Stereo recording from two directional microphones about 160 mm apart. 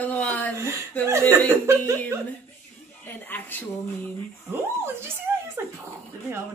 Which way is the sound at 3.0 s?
10° left (ahead or behind).